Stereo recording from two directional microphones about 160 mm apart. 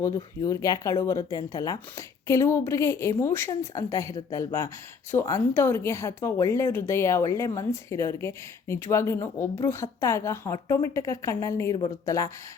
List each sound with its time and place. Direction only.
0.4 s speech: 20° left (ahead or behind)